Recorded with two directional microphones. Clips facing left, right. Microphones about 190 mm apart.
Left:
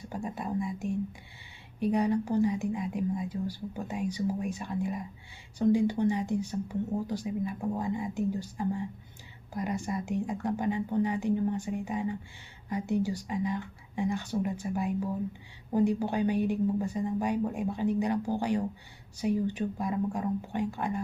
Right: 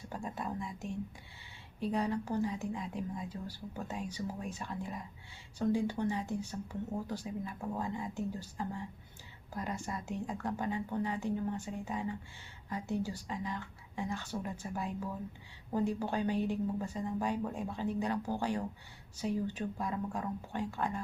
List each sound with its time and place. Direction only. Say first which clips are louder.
0.1 s whispering: left 6 dB; 15° left (ahead or behind)
1.8 s speech: left 7 dB; 15° left (ahead or behind)